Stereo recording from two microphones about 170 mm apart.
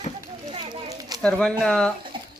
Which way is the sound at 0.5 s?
30° right (ahead or behind).